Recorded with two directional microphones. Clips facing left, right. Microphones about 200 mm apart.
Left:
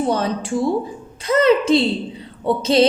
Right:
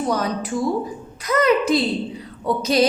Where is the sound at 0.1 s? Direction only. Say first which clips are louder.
Left 2 dB; 30° left (ahead or behind).